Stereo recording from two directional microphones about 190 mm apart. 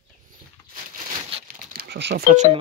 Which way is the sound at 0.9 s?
40° right (ahead or behind).